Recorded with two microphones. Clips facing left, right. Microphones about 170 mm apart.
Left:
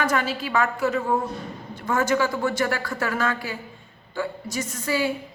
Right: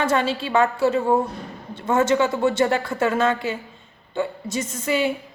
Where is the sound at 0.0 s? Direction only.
25° right (ahead or behind).